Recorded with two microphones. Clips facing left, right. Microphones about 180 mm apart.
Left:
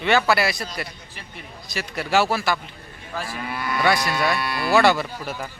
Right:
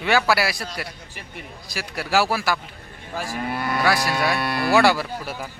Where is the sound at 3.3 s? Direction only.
45° right (ahead or behind).